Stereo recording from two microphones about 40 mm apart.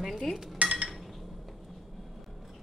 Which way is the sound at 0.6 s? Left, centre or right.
Right.